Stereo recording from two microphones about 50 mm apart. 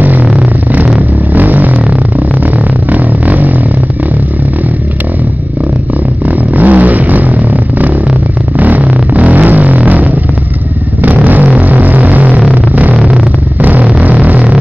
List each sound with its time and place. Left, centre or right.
0.0 s vehicle: right
2.9 s a sound: right
6.2 s vehicle: right
8.5 s a sound: right
11.5 s music: right
12.9 s vehicle: centre
13.6 s vehicle: right
13.8 s music: right